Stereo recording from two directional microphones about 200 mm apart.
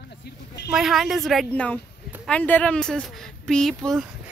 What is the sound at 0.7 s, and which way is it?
Speech, centre (ahead or behind).